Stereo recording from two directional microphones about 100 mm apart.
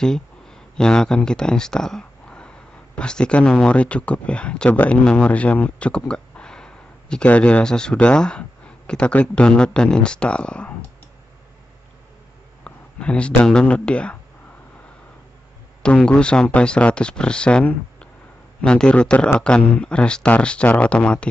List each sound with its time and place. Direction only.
0.0 s speech: 5° left (ahead or behind)
12.6 s speech: 10° left (ahead or behind)
15.8 s speech: 10° left (ahead or behind)